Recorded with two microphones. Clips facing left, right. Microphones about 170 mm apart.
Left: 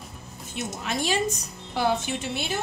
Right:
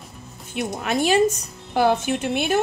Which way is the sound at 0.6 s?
60° right (ahead or behind).